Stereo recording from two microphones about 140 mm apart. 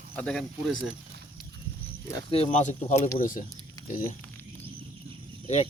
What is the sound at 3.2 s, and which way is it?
Speech, 70° left (ahead or behind).